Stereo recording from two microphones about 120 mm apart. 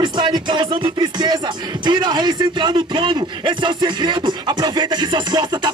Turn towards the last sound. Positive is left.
turn(degrees=-40)  # may be behind; listen again after turning